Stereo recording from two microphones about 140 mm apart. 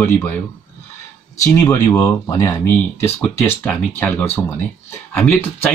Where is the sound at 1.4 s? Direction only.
20° left (ahead or behind).